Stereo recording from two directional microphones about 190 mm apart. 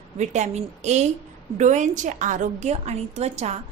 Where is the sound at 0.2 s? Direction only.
40° right (ahead or behind).